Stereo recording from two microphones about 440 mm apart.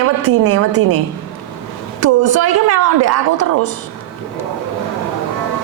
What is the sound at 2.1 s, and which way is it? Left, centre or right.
A woman's voice, right.